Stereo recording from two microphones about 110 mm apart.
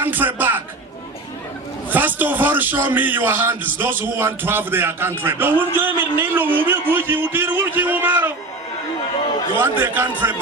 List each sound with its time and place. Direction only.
0.0 s a man's voice: 15° right (ahead or behind)
1.9 s a man's voice: 15° right (ahead or behind)
9.6 s a man's voice: 15° right (ahead or behind)